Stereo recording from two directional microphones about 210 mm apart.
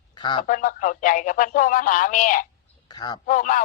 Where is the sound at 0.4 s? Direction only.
40° left (ahead or behind).